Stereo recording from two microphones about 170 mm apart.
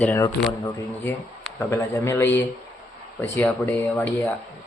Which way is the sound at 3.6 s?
10° left (ahead or behind).